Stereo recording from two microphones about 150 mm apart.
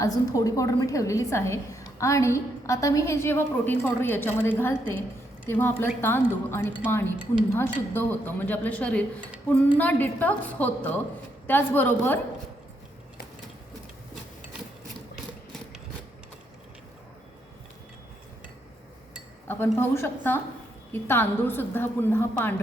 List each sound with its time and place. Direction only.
0.0 s a woman's voice: 25° left (ahead or behind)
19.5 s a woman's voice: 15° left (ahead or behind)